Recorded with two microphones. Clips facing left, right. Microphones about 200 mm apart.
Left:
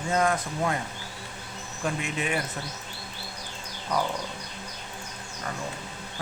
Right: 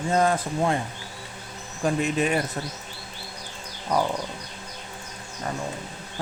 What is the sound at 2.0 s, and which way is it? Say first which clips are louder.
Speech: right 7 dB; 40° right (ahead or behind).